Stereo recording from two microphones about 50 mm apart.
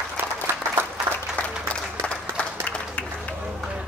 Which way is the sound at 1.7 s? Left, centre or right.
Left.